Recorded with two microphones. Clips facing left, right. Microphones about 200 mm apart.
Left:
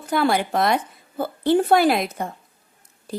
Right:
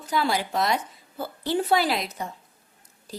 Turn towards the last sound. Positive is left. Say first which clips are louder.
# left 8 dB
turn(degrees=55)  # may be behind; listen again after turning